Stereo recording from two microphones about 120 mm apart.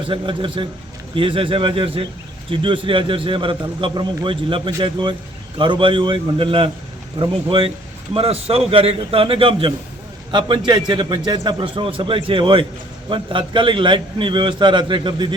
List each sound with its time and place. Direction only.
0.1 s a man's voice: 45° right (ahead or behind)